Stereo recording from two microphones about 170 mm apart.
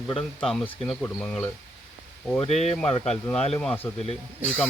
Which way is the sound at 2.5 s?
40° left (ahead or behind).